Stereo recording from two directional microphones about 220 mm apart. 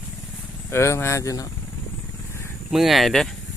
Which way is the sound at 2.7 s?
Centre (ahead or behind).